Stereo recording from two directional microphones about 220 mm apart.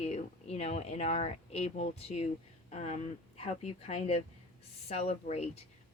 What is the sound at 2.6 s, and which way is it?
Speech, 30° left (ahead or behind).